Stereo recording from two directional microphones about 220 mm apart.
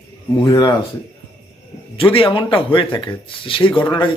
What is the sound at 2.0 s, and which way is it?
Speech, 25° left (ahead or behind).